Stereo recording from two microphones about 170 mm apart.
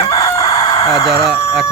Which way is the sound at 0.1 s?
20° left (ahead or behind).